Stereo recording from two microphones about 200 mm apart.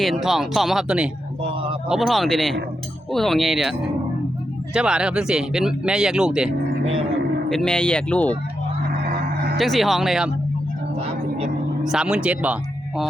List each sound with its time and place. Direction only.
0.0 s speech: centre (ahead or behind)
7.5 s speech: 5° left (ahead or behind)
9.6 s speech: centre (ahead or behind)
11.8 s speech: 5° right (ahead or behind)